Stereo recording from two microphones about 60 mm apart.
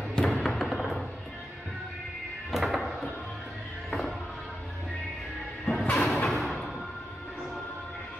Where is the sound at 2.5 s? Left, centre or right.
Centre.